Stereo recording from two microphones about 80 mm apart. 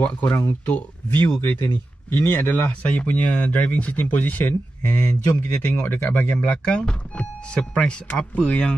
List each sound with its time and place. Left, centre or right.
0.0 s speech: centre